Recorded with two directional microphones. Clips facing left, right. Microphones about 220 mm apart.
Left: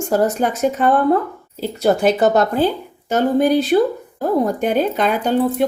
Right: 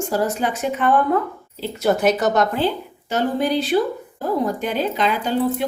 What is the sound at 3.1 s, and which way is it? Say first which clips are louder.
Speech: left 5 dB; 50° left (ahead or behind).